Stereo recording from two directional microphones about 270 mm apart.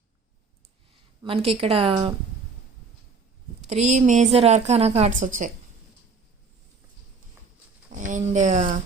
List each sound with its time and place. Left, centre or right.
1.2 s a woman's voice: right
3.7 s a woman's voice: right
7.9 s speech: right